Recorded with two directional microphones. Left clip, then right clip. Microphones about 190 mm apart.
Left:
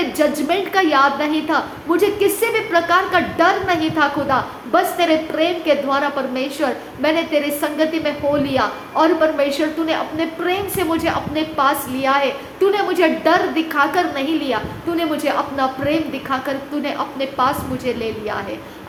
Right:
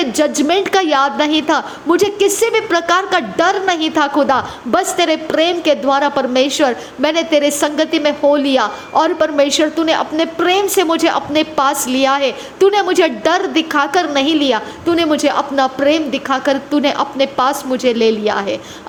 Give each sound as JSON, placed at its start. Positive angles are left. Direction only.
{"t": 0.0, "sound": "a woman's voice", "side_deg": -45}